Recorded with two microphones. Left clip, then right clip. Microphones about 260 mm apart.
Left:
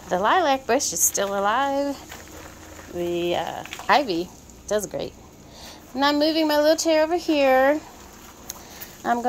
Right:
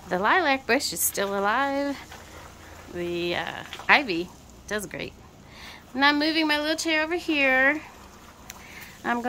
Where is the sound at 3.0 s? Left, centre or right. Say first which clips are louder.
Left 4 dB; right.